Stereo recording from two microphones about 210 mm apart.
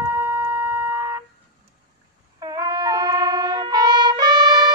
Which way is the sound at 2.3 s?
20° right (ahead or behind).